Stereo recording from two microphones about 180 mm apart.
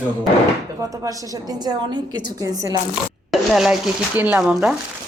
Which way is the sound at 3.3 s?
Centre (ahead or behind).